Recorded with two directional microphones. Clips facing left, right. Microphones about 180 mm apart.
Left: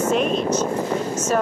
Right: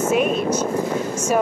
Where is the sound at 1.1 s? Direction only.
10° right (ahead or behind).